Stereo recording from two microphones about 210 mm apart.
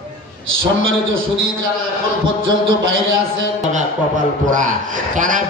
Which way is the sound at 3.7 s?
35° right (ahead or behind).